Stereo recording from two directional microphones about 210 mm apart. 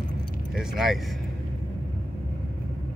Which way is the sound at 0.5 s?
Centre (ahead or behind).